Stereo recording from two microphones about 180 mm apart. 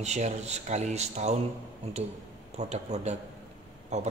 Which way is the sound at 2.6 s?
40° right (ahead or behind).